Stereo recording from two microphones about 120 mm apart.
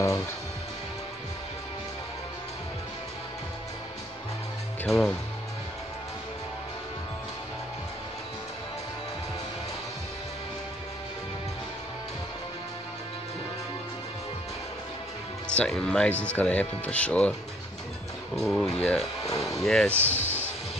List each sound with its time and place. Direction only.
4.8 s speech: centre (ahead or behind)
15.4 s speech: 10° left (ahead or behind)
18.3 s speech: 5° left (ahead or behind)
19.9 s speech: 20° right (ahead or behind)